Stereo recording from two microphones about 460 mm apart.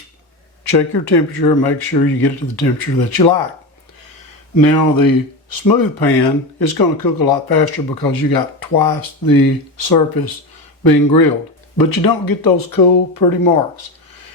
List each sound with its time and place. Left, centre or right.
0.6 s speech: left
4.6 s speech: left